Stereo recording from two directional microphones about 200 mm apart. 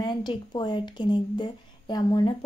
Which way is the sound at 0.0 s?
25° left (ahead or behind).